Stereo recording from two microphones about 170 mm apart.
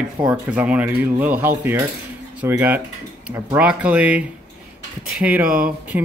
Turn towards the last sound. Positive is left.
turn(degrees=-10)  # may be behind; listen again after turning